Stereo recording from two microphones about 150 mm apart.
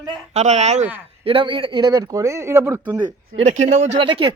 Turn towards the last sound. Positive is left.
turn(degrees=-35)  # may be behind; listen again after turning